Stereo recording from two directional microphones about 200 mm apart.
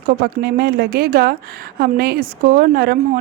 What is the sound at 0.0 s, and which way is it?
A woman's voice, 50° right (ahead or behind).